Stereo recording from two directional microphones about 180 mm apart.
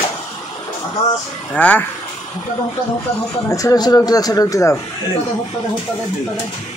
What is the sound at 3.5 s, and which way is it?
Speech, 20° left (ahead or behind).